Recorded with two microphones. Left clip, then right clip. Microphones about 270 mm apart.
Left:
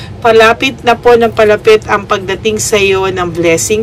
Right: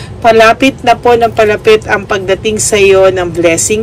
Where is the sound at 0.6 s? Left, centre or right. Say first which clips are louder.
Right 1 dB; centre.